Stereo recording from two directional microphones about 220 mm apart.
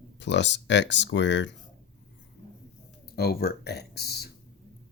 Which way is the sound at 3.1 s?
45° left (ahead or behind).